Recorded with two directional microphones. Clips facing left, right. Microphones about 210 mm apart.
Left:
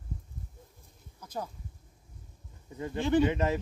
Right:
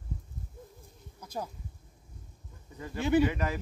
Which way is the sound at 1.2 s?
10° right (ahead or behind).